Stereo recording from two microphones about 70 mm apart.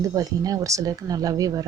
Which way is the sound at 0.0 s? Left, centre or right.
Right.